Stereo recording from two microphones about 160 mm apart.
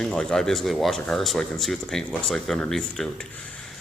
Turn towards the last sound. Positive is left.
turn(degrees=0)  # may be behind; listen again after turning